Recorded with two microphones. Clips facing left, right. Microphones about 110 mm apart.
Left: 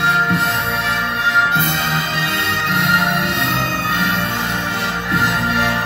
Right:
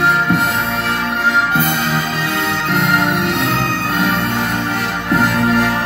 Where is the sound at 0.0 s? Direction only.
50° right (ahead or behind).